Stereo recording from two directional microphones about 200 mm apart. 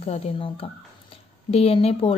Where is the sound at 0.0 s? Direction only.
30° left (ahead or behind).